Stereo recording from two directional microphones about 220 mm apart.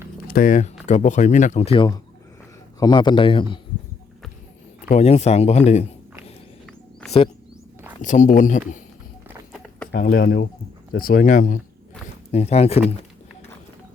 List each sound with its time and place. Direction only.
0.3 s speech: 40° left (ahead or behind); by 3.6 s 25° left (ahead or behind)
4.9 s speech: 30° left (ahead or behind)
7.0 s wild animals: 5° left (ahead or behind)
8.0 s speech: 35° left (ahead or behind)
9.9 s speech: 45° left (ahead or behind); by 12.8 s 30° left (ahead or behind)